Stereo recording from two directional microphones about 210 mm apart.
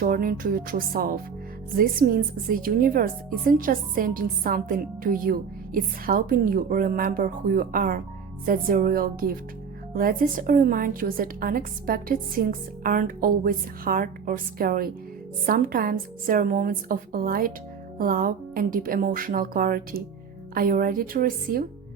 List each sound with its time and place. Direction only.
0.0 s a woman's voice: 45° right (ahead or behind)